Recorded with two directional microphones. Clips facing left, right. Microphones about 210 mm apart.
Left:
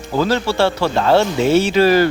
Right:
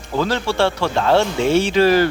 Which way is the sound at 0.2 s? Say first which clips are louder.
Left 2 dB; 5° left (ahead or behind).